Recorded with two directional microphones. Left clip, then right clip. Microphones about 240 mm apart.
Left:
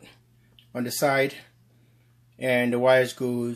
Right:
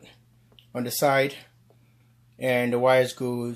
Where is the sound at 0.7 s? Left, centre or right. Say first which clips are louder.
Right 1 dB; centre.